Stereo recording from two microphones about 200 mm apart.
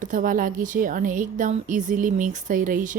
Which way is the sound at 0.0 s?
40° right (ahead or behind).